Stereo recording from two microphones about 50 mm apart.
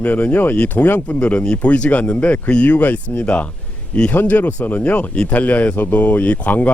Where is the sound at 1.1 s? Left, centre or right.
Left.